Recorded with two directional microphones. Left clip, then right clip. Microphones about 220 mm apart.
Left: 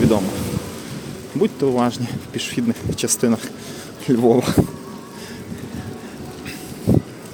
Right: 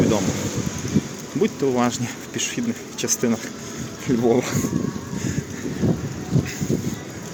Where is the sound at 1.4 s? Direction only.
15° left (ahead or behind).